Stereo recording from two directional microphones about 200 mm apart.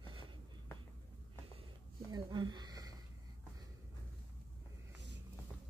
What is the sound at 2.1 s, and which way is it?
Speech, 20° right (ahead or behind).